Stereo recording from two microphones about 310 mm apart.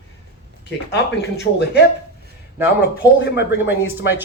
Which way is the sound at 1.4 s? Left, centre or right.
Left.